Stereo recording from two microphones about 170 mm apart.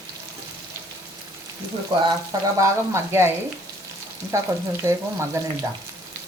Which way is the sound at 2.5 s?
15° right (ahead or behind).